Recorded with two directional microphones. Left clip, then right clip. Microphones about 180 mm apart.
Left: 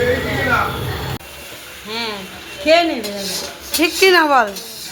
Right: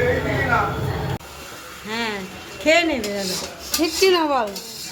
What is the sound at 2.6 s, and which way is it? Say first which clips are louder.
Speech: left 4 dB; 60° right (ahead or behind).